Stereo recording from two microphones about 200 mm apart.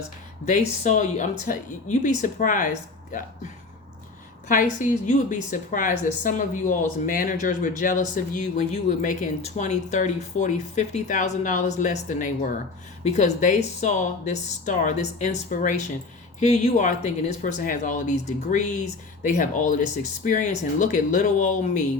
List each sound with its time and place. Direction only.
0.4 s speech: 40° left (ahead or behind)
4.4 s speech: 40° left (ahead or behind)